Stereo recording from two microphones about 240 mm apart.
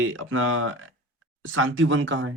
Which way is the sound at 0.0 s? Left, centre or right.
Right.